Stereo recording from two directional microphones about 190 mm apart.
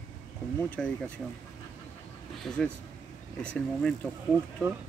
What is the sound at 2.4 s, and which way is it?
Speech, 5° left (ahead or behind).